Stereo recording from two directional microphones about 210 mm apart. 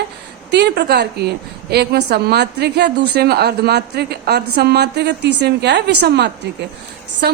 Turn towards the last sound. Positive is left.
turn(degrees=-50)  # may be behind; listen again after turning